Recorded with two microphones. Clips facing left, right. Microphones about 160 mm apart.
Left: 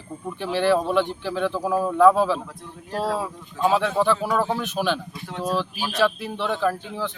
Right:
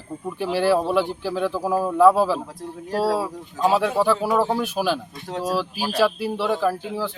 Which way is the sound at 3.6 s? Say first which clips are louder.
Right 1 dB; 10° right (ahead or behind).